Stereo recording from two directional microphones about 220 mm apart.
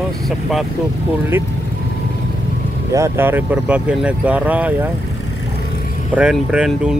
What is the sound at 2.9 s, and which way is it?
Speech, 10° right (ahead or behind).